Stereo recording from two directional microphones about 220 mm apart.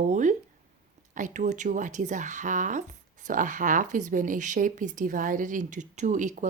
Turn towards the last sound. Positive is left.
turn(degrees=-35)  # may be behind; listen again after turning